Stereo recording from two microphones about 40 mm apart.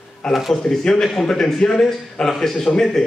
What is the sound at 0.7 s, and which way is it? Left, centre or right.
A man's voice, centre.